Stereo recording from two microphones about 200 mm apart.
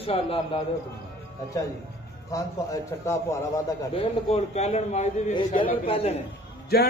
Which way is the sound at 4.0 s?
30° left (ahead or behind).